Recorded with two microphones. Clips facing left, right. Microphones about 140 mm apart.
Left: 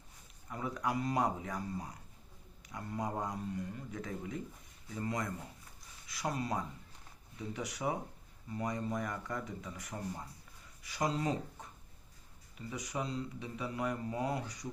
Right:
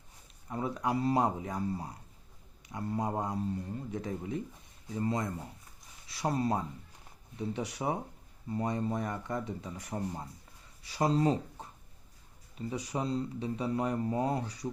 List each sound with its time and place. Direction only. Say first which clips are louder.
0.5 s speech: right 4 dB; 25° right (ahead or behind)